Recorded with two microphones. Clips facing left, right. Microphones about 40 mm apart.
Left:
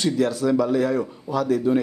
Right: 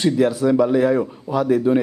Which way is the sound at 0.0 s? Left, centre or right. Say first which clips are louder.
Right 4 dB; centre.